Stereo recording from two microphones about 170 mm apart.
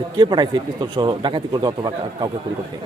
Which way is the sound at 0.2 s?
25° right (ahead or behind).